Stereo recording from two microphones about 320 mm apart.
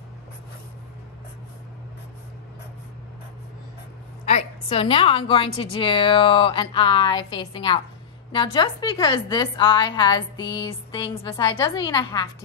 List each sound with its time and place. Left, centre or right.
4.3 s a woman's voice: left